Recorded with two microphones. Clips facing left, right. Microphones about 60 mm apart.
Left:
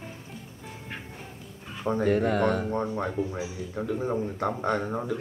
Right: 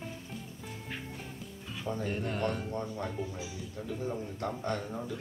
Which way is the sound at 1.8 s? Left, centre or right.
Left.